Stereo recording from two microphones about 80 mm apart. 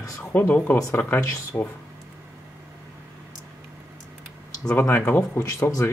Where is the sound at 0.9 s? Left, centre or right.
Left.